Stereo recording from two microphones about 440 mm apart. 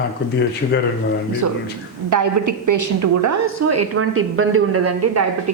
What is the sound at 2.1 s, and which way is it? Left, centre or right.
Speech, right.